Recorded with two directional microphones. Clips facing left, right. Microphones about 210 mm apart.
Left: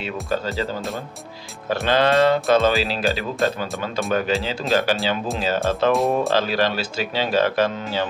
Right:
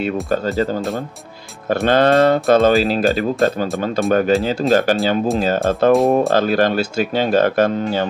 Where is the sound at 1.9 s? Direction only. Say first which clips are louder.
Right 4 dB; 50° right (ahead or behind).